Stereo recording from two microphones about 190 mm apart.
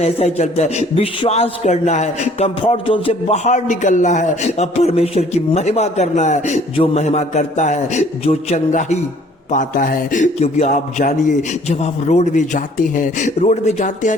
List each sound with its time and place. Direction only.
0.0 s a man's voice: 35° left (ahead or behind)